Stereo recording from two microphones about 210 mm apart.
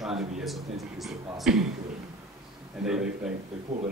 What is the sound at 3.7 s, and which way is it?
Speech, 30° right (ahead or behind).